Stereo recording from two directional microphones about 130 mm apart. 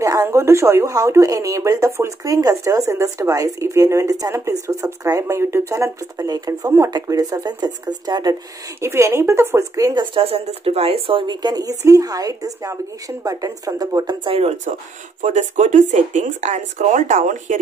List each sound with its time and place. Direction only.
0.0 s speech: 25° right (ahead or behind)
10.1 s speech: 50° right (ahead or behind)
14.4 s speech: 65° right (ahead or behind)